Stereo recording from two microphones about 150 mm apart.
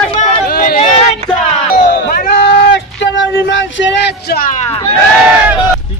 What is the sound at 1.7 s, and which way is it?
Speech, 70° left (ahead or behind).